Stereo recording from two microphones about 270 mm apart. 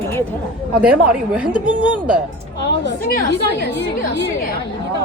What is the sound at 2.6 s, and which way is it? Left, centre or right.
A woman's voice, left.